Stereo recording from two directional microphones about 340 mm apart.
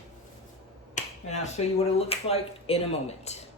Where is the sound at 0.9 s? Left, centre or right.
Centre.